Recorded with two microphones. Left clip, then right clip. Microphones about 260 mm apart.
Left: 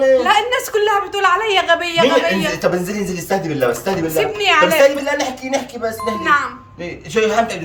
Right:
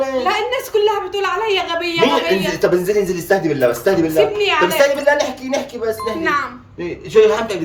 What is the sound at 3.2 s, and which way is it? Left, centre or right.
Speech, centre.